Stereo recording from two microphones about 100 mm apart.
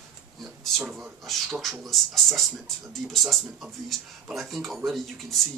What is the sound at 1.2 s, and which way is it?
Speech, centre (ahead or behind).